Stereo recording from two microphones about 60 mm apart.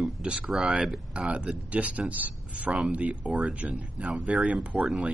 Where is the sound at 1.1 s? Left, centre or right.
Centre.